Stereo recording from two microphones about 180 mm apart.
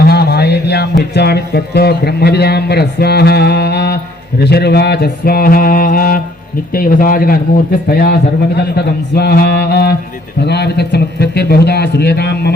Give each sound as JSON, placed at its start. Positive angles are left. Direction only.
{"t": 0.0, "sound": "a man's voice", "side_deg": 65}